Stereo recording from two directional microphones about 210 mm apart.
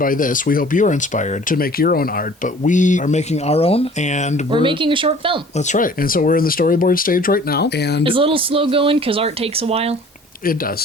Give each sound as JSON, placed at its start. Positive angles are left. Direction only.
{"t": 0.0, "sound": "speech", "side_deg": 40}
{"t": 4.5, "sound": "speech", "side_deg": -25}
{"t": 5.5, "sound": "speech", "side_deg": 35}
{"t": 8.0, "sound": "speech", "side_deg": -25}